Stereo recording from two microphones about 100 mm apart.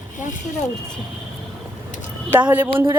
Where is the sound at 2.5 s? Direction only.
25° right (ahead or behind).